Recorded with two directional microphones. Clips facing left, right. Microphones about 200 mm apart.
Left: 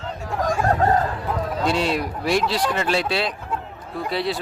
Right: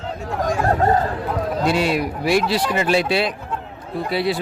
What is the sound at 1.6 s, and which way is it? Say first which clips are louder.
A man's voice: right 2 dB; 10° right (ahead or behind).